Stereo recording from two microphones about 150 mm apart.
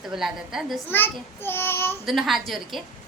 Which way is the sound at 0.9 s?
15° left (ahead or behind).